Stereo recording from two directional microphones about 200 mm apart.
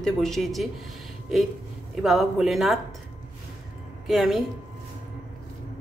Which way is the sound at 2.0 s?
Centre (ahead or behind).